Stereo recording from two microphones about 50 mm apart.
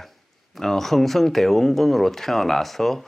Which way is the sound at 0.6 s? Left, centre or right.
Centre.